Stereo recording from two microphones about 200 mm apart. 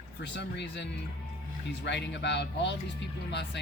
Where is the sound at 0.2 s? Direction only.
60° left (ahead or behind).